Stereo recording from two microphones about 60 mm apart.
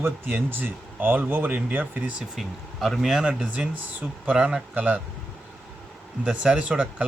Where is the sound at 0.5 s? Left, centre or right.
Right.